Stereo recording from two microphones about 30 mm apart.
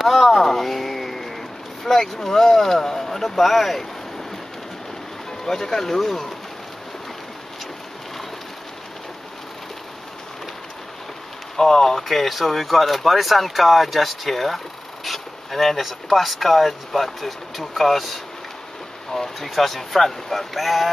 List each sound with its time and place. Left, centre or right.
0.0 s a sound: centre
0.3 s vehicle: centre
1.9 s speech: centre
3.2 s speech: centre
5.4 s speech: centre
11.5 s speech: centre
12.0 s speech: centre